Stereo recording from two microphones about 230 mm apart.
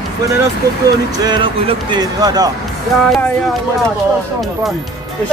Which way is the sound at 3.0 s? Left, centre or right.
Centre.